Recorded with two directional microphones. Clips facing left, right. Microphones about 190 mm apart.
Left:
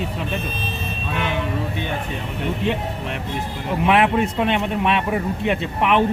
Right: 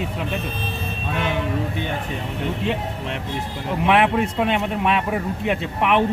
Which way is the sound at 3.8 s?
Centre (ahead or behind).